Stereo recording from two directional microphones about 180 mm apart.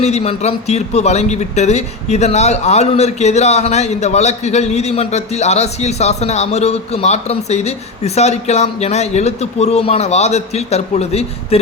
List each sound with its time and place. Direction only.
0.0 s a man's voice: 35° left (ahead or behind)